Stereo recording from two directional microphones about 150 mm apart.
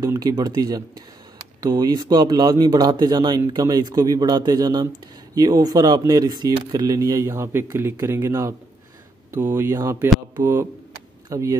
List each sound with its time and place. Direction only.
0.0 s speech: 25° right (ahead or behind)